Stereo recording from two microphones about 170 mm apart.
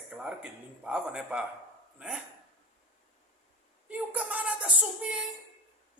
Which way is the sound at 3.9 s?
10° right (ahead or behind).